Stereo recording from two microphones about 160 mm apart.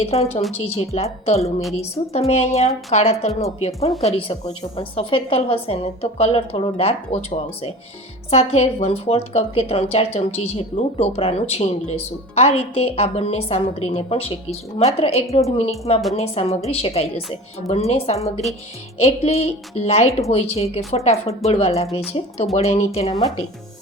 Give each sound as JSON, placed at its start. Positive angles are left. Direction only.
{"t": 0.0, "sound": "speech", "side_deg": 40}
{"t": 22.5, "sound": "speech", "side_deg": 40}